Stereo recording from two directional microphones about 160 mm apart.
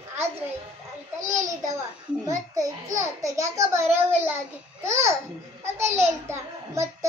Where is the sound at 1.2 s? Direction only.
20° right (ahead or behind).